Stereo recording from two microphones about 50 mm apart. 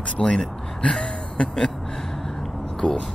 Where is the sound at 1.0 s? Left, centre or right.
Left.